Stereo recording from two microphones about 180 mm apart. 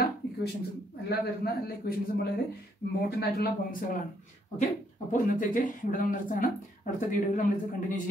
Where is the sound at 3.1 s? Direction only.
60° left (ahead or behind).